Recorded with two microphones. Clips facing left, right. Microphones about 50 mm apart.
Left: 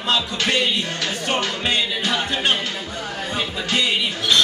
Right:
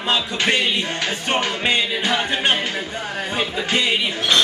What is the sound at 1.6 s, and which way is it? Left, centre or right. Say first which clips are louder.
Music: right 2 dB; right.